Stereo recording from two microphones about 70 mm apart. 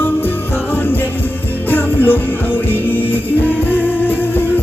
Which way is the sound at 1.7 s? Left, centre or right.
Left.